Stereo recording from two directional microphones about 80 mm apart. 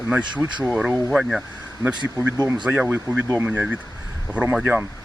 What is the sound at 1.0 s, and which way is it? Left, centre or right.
Speech, centre.